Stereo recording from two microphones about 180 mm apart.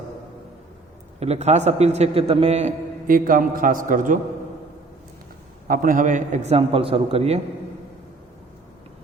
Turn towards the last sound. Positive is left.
turn(degrees=-35)  # may be behind; listen again after turning